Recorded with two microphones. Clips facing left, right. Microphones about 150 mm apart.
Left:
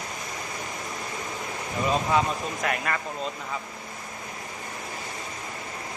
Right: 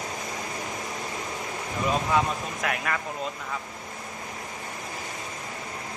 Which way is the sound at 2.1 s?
Centre (ahead or behind).